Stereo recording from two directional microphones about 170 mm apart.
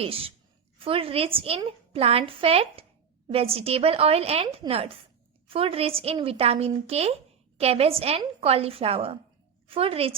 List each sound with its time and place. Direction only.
0.0 s a woman's voice: 35° right (ahead or behind)
5.5 s a woman's voice: 35° right (ahead or behind)